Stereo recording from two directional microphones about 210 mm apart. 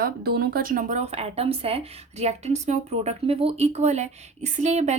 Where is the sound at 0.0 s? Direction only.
50° right (ahead or behind).